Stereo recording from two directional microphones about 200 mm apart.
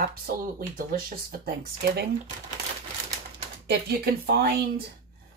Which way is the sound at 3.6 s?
50° right (ahead or behind).